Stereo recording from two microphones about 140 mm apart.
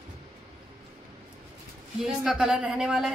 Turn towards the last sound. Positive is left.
turn(degrees=-5)  # may be behind; listen again after turning